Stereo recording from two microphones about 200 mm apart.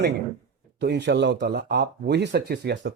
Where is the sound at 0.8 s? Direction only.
60° right (ahead or behind).